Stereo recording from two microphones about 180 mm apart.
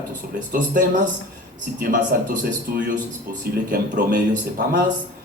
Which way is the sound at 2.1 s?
55° right (ahead or behind).